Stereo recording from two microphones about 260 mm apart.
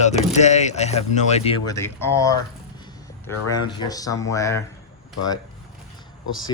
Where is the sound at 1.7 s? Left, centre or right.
Centre.